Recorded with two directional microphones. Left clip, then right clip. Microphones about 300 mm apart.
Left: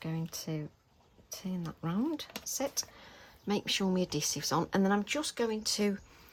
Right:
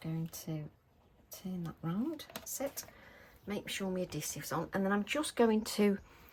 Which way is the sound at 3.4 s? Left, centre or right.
Centre.